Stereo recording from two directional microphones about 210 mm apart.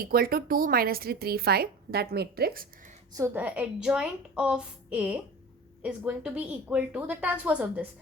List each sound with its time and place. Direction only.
0.0 s speech: 45° right (ahead or behind)
3.1 s a woman's voice: 15° right (ahead or behind)